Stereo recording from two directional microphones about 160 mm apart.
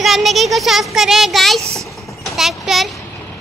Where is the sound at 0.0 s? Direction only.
Centre (ahead or behind).